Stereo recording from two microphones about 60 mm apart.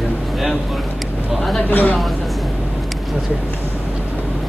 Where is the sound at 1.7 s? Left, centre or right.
Left.